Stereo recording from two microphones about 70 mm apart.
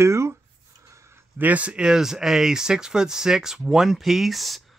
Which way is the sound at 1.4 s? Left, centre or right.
Right.